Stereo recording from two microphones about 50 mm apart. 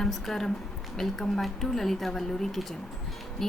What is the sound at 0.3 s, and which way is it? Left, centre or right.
A woman's voice, centre.